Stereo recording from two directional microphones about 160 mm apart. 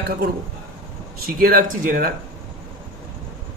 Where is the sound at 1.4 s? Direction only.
60° right (ahead or behind).